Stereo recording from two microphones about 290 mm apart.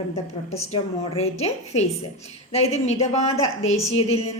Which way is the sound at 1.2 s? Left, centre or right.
Left.